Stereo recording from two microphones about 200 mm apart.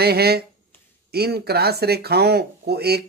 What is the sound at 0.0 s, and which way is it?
A man's voice, 50° right (ahead or behind).